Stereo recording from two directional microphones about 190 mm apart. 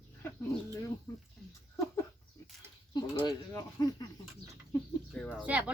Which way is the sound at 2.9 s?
20° left (ahead or behind).